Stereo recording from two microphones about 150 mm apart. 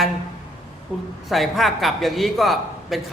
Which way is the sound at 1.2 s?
Centre (ahead or behind).